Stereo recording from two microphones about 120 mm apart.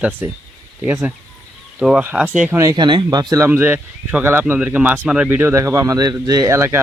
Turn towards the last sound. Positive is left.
turn(degrees=-20)  # may be behind; listen again after turning